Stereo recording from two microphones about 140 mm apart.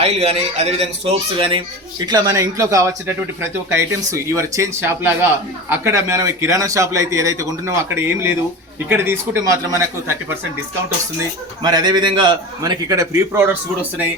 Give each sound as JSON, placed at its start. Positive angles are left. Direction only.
{"t": 0.0, "sound": "speech", "side_deg": -50}
{"t": 2.0, "sound": "speech", "side_deg": -25}